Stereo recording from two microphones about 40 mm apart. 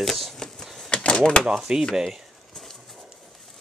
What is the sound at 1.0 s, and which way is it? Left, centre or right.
Speech, left.